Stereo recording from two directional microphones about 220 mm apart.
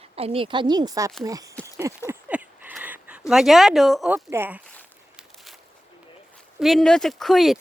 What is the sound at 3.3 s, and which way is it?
Speech, centre (ahead or behind).